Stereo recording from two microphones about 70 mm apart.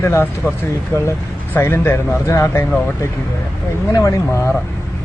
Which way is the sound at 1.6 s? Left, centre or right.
Left.